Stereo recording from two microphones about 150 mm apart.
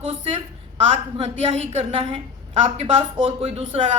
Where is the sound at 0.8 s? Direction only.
40° right (ahead or behind).